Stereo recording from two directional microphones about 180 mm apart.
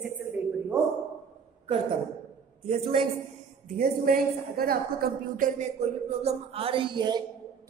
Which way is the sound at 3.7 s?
55° right (ahead or behind).